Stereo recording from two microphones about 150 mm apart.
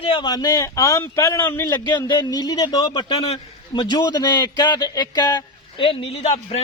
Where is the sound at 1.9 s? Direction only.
30° left (ahead or behind).